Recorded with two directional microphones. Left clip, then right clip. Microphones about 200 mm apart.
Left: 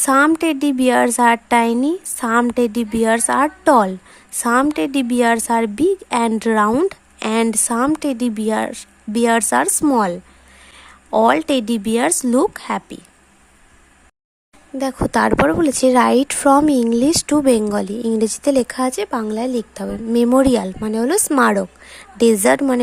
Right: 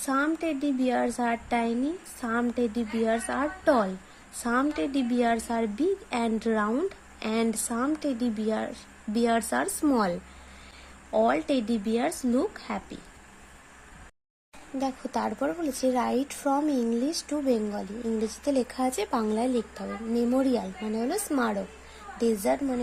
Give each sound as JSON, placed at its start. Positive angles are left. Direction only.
{"t": 0.0, "sound": "a woman's voice", "side_deg": 35}
{"t": 14.8, "sound": "a woman's voice", "side_deg": 40}